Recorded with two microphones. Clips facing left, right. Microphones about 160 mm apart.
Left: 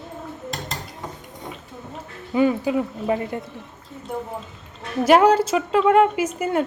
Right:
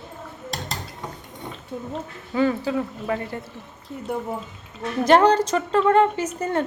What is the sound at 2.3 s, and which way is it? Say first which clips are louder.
A woman's voice: left 2 dB; 15° left (ahead or behind).